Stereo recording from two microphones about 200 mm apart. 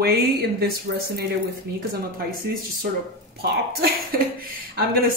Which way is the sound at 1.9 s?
50° right (ahead or behind).